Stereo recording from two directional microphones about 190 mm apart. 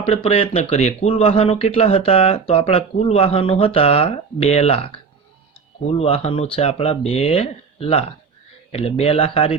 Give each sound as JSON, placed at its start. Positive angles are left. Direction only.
{"t": 0.0, "sound": "speech", "side_deg": 30}
{"t": 6.0, "sound": "speech", "side_deg": 30}